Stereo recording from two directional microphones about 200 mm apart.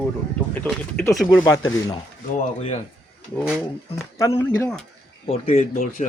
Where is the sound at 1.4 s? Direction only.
20° left (ahead or behind).